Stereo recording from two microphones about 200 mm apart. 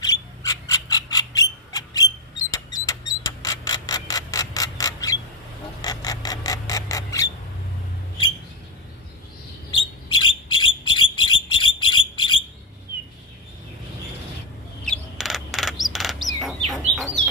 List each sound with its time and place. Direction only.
0.0 s frog: 20° left (ahead or behind)
5.8 s a sound: 20° left (ahead or behind)
10.0 s bird: 25° left (ahead or behind)
14.9 s bird: centre (ahead or behind)